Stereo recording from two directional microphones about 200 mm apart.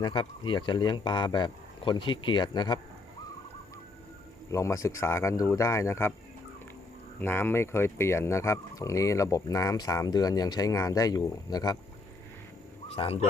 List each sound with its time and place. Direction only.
0.0 s speech: 25° left (ahead or behind)
4.5 s speech: 15° left (ahead or behind)
7.2 s speech: 10° left (ahead or behind)
12.9 s speech: 30° left (ahead or behind)